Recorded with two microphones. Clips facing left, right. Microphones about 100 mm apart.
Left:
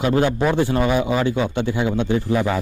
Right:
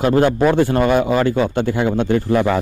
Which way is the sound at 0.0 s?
45° right (ahead or behind).